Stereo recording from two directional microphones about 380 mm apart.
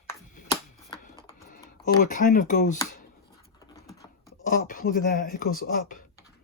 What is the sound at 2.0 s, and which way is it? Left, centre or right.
Speech, centre.